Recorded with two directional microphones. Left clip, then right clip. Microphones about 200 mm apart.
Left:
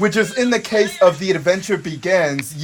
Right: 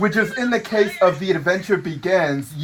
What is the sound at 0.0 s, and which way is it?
Speech, 45° left (ahead or behind).